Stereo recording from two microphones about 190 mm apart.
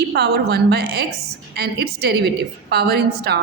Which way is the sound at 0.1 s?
60° right (ahead or behind).